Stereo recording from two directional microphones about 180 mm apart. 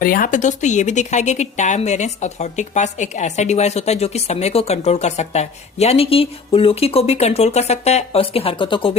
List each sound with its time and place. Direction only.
0.0 s speech: 50° left (ahead or behind); by 8.9 s 30° left (ahead or behind)